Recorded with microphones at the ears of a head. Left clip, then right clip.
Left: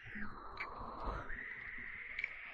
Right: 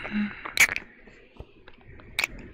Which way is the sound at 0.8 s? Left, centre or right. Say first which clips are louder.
Left 7 dB; left.